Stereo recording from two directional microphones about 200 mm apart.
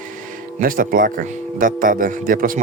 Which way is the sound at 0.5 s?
45° right (ahead or behind).